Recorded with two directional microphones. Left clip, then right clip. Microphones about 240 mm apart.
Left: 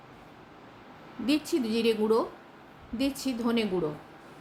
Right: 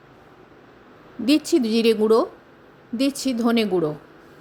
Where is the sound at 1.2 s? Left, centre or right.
Right.